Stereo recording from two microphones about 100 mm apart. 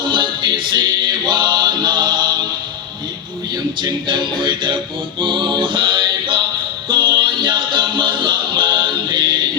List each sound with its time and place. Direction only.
0.1 s music: 50° right (ahead or behind)
3.8 s music: 50° right (ahead or behind)
5.2 s a capella: 50° right (ahead or behind)
6.8 s music: 50° right (ahead or behind)